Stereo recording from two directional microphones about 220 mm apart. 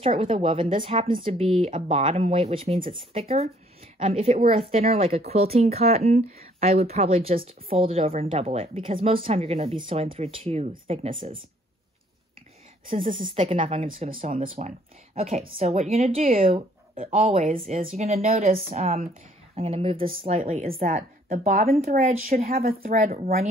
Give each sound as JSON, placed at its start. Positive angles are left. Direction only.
{"t": 0.0, "sound": "a woman's voice", "side_deg": -25}
{"t": 12.9, "sound": "a woman's voice", "side_deg": -25}
{"t": 16.5, "sound": "a woman's voice", "side_deg": -25}